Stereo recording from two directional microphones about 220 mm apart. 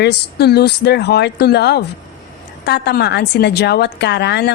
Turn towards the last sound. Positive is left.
turn(degrees=50)  # may be behind; listen again after turning